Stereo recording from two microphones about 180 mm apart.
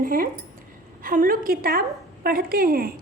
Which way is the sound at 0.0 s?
50° right (ahead or behind).